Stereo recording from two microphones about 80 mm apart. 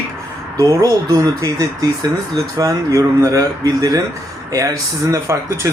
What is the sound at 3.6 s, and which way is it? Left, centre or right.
Speech, right.